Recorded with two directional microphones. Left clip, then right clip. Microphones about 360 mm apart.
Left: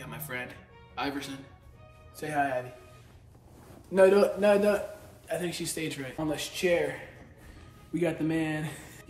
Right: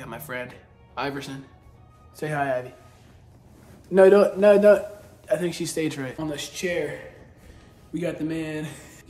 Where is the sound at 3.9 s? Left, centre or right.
Centre.